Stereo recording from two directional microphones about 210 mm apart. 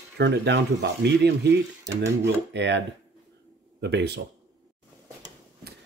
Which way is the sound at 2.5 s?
55° right (ahead or behind).